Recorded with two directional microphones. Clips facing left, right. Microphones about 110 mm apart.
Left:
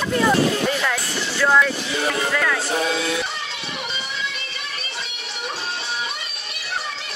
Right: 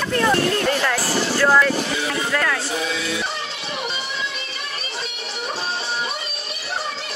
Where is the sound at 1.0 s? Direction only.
35° right (ahead or behind).